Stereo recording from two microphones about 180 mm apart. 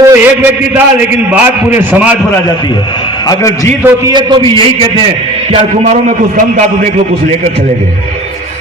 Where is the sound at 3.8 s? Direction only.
25° right (ahead or behind).